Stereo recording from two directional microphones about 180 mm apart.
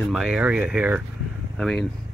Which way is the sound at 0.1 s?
5° right (ahead or behind).